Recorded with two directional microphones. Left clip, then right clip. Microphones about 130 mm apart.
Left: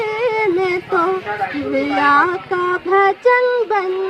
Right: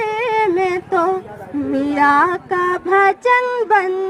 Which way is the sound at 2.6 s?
15° right (ahead or behind).